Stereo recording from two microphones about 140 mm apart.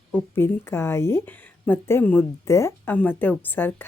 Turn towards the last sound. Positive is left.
turn(degrees=15)  # may be behind; listen again after turning